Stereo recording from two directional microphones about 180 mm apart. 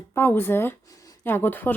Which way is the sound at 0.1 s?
10° left (ahead or behind).